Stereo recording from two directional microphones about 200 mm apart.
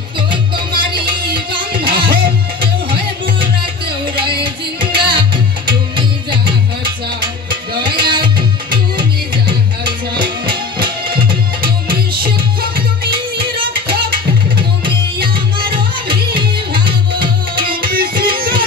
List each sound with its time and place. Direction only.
0.3 s music: 25° right (ahead or behind)
4.9 s music: 25° right (ahead or behind)
11.6 s music: 50° right (ahead or behind)
16.8 s music: 50° right (ahead or behind)